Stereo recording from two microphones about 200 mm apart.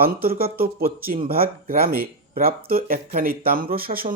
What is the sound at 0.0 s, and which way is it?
Speech, 50° right (ahead or behind).